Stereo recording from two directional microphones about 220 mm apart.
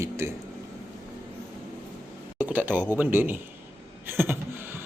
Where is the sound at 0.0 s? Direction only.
10° right (ahead or behind).